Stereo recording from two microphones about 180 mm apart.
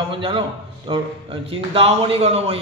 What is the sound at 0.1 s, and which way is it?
A man's voice, 30° right (ahead or behind).